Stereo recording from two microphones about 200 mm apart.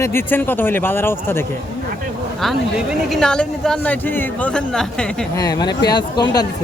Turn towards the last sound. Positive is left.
turn(degrees=20)  # may be behind; listen again after turning